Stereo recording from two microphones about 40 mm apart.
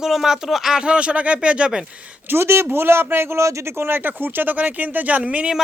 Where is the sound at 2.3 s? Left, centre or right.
Right.